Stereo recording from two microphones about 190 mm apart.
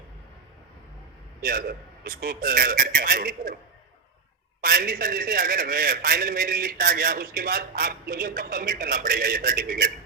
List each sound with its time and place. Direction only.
1.4 s a man's voice: 50° right (ahead or behind)
4.6 s a man's voice: 50° right (ahead or behind)